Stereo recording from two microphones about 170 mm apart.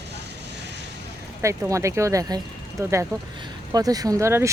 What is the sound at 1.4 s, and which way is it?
Speech, 15° right (ahead or behind).